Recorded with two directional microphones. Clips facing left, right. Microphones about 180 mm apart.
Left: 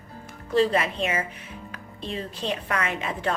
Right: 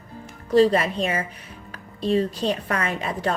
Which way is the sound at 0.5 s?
35° right (ahead or behind).